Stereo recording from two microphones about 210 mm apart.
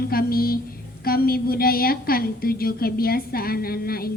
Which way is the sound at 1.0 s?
45° left (ahead or behind).